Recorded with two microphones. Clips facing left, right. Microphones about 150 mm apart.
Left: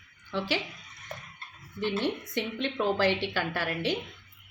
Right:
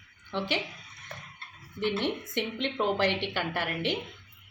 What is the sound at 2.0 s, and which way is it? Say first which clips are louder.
A woman's voice: even; 20° right (ahead or behind).